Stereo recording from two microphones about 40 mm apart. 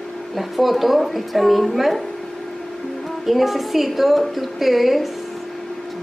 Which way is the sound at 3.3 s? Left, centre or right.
Centre.